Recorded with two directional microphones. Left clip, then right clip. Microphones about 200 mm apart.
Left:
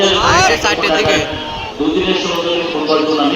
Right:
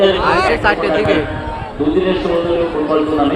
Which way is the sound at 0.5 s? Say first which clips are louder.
Left 1 dB; 30° right (ahead or behind).